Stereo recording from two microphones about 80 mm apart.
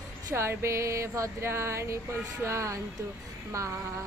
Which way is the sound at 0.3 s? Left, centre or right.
Right.